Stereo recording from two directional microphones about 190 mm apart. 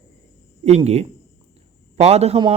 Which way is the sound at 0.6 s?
35° right (ahead or behind).